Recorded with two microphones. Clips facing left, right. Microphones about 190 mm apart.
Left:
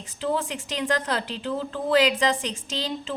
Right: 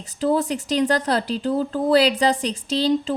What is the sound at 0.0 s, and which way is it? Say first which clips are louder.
Speech: right 6 dB; 40° right (ahead or behind).